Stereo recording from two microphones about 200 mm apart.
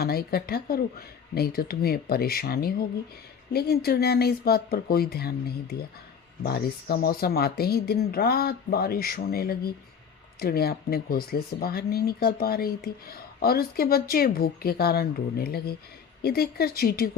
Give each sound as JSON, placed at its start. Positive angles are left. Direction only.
{"t": 0.0, "sound": "speech", "side_deg": 50}
{"t": 6.4, "sound": "speech", "side_deg": 50}